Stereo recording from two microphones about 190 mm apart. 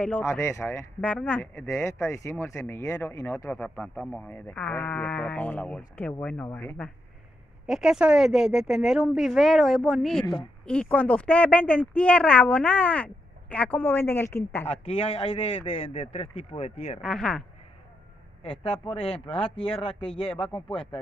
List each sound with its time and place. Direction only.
0.0 s speech: 10° left (ahead or behind)
7.6 s speech: centre (ahead or behind)
14.7 s a man's voice: 30° left (ahead or behind)
17.0 s speech: 5° left (ahead or behind)
18.6 s speech: 30° left (ahead or behind)
19.7 s speech: 5° left (ahead or behind)
20.5 s speech: 25° left (ahead or behind)